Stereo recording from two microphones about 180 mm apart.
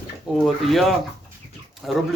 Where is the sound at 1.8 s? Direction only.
Centre (ahead or behind).